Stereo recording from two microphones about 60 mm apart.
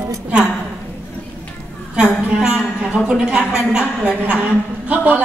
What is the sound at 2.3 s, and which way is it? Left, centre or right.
A woman's voice, centre.